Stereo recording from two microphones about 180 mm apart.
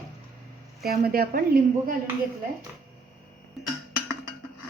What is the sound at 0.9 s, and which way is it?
Speech, 55° right (ahead or behind).